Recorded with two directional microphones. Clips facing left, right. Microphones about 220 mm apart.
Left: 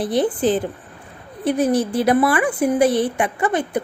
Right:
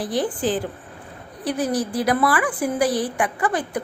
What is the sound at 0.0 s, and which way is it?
A woman's voice, 25° left (ahead or behind).